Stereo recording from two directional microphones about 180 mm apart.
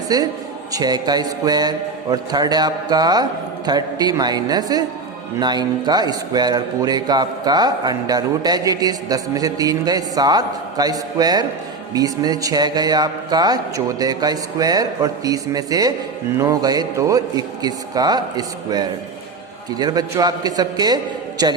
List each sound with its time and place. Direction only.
0.1 s a man's voice: 20° right (ahead or behind)